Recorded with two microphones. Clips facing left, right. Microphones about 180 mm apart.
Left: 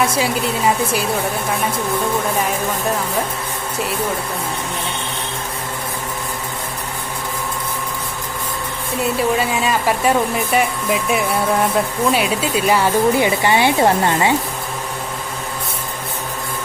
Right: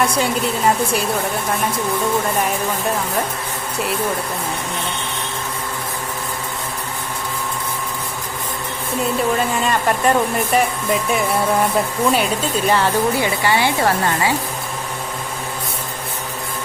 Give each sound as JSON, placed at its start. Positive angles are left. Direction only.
{"t": 0.0, "sound": "speech", "side_deg": 5}
{"t": 9.3, "sound": "speech", "side_deg": 5}